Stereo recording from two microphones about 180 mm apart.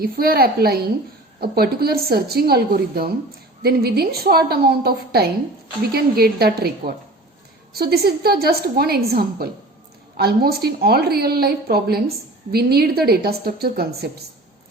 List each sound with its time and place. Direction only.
0.0 s a woman's voice: 55° right (ahead or behind)